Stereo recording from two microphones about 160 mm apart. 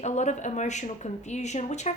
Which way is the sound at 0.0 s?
50° left (ahead or behind).